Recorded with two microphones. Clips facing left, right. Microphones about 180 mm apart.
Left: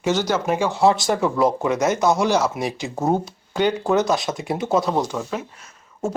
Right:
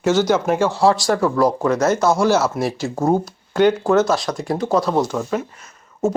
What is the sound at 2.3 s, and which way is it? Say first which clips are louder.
Speech: right 3 dB; 15° left (ahead or behind).